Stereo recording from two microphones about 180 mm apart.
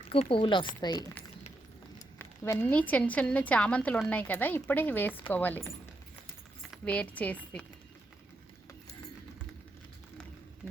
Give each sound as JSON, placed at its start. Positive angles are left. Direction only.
{"t": 0.1, "sound": "a woman's voice", "side_deg": 30}